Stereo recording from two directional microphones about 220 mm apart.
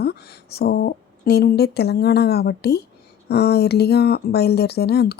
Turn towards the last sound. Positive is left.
turn(degrees=45)  # may be behind; listen again after turning